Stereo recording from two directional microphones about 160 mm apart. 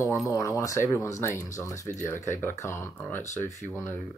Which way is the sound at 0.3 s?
20° left (ahead or behind).